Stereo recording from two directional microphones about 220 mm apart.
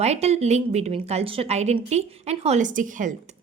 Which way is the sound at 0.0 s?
30° right (ahead or behind).